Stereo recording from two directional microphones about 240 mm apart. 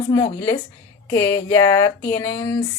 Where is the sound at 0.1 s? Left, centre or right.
Centre.